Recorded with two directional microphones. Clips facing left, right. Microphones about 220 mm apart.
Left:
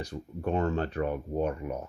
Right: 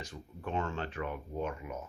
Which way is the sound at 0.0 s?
40° left (ahead or behind).